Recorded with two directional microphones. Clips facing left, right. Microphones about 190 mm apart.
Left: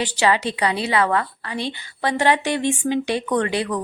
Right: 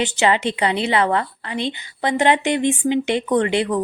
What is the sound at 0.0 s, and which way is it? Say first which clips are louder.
Speech: right 2 dB; 25° right (ahead or behind).